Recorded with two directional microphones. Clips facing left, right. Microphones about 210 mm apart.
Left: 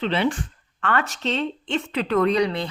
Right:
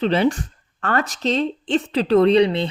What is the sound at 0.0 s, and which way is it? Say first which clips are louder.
Speech: right 4 dB; 40° right (ahead or behind).